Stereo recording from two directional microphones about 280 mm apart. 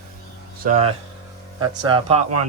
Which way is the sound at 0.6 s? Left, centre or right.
Right.